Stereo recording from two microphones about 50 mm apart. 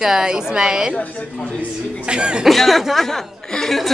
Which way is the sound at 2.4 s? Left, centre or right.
Centre.